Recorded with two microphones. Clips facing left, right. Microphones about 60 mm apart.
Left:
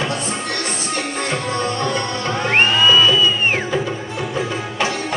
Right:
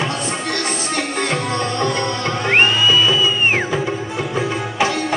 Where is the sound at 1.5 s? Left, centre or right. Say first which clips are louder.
Right 1 dB; right.